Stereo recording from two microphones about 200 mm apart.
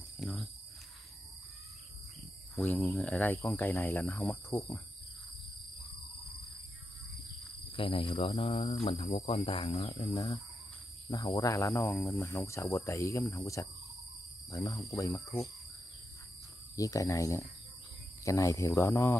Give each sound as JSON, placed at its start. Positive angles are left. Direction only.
{"t": 0.2, "sound": "speech", "side_deg": 0}
{"t": 2.5, "sound": "speech", "side_deg": 0}
{"t": 7.7, "sound": "speech", "side_deg": 25}
{"t": 10.1, "sound": "speech", "side_deg": 15}
{"t": 16.7, "sound": "speech", "side_deg": 15}